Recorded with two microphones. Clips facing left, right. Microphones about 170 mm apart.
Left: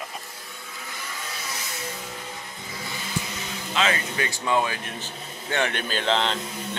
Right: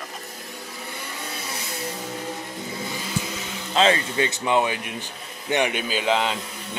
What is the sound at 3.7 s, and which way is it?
Speech, 25° right (ahead or behind).